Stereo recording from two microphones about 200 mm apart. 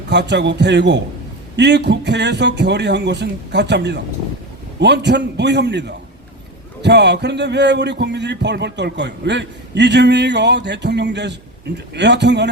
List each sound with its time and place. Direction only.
0.1 s speech: 60° right (ahead or behind)